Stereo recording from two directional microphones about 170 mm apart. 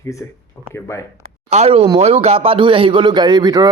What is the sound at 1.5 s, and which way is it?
A man's voice, 40° right (ahead or behind).